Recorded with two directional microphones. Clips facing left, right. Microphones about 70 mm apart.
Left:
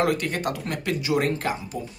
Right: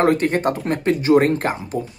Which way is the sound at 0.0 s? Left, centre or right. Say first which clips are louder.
Right 7 dB; right.